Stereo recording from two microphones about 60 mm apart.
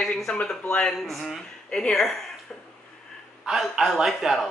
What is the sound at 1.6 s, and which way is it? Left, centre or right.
Speech, centre.